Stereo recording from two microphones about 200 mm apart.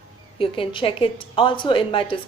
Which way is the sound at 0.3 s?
25° left (ahead or behind).